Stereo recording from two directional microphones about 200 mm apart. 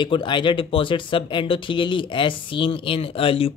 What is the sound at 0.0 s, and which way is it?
Speech, 25° left (ahead or behind).